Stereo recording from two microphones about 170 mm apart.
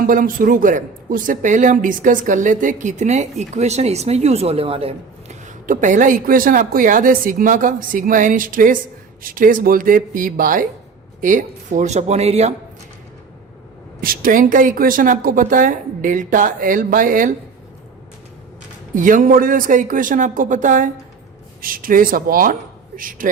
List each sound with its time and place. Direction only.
0.0 s a man's voice: 55° right (ahead or behind); by 12.5 s 40° right (ahead or behind)
14.0 s a man's voice: 60° right (ahead or behind)
18.9 s a man's voice: 50° right (ahead or behind)